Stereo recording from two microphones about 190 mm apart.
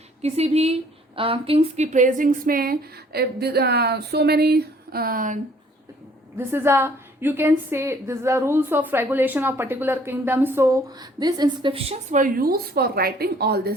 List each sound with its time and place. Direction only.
0.2 s speech: 35° right (ahead or behind)
6.3 s a woman's voice: 10° right (ahead or behind)
12.1 s speech: 45° right (ahead or behind)